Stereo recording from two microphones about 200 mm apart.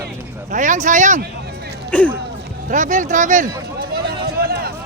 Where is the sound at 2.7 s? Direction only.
40° right (ahead or behind).